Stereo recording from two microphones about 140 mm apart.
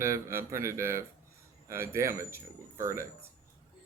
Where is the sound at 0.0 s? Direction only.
20° right (ahead or behind).